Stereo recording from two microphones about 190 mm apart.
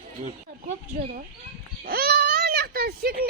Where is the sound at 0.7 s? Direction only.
40° right (ahead or behind).